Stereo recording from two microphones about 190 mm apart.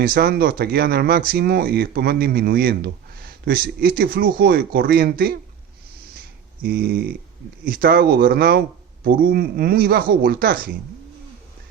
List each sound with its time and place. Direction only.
0.0 s speech: 50° right (ahead or behind)
6.6 s speech: 50° right (ahead or behind)